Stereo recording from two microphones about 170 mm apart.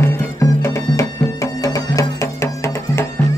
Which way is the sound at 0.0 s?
15° left (ahead or behind).